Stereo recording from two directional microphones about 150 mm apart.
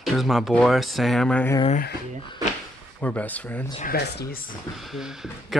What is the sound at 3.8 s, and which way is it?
Speech, 80° left.